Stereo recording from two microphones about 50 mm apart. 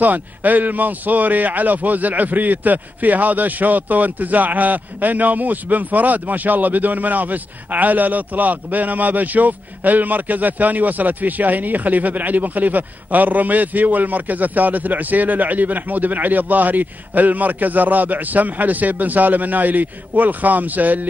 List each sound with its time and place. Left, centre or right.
0.0 s a man's voice: right